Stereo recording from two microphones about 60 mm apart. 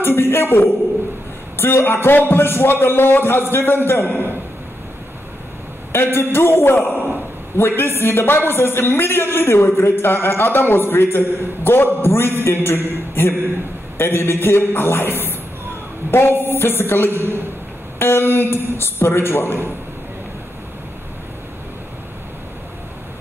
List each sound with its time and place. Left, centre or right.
0.0 s a woman's voice: left
5.9 s a man's voice: left